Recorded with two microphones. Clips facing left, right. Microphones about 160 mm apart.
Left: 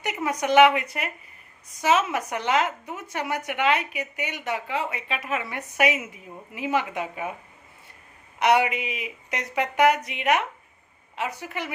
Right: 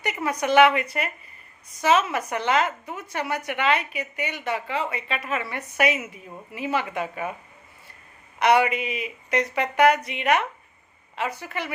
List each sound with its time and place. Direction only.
0.0 s a woman's voice: 15° left (ahead or behind)
8.4 s a woman's voice: 15° left (ahead or behind)